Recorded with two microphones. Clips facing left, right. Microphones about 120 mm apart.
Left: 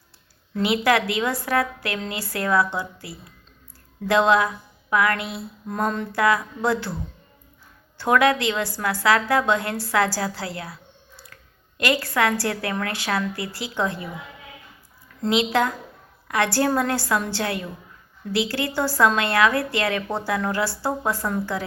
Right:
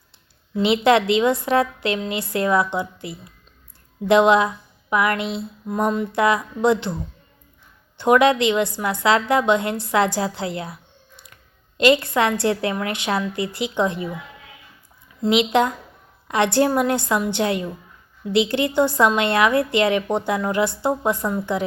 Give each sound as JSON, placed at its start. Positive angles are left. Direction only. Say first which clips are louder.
{"t": 0.5, "sound": "a woman's voice", "louder": "right 4 dB", "side_deg": -20}
{"t": 5.6, "sound": "mantra", "louder": "right 4 dB", "side_deg": -10}
{"t": 6.1, "sound": "a woman's voice", "louder": "right 2 dB", "side_deg": -20}
{"t": 7.9, "sound": "a woman's voice", "louder": "right 3 dB", "side_deg": -20}
{"t": 11.8, "sound": "a woman's voice", "louder": "right 5 dB", "side_deg": -20}
{"t": 15.5, "sound": "a woman's voice", "louder": "right 3 dB", "side_deg": -20}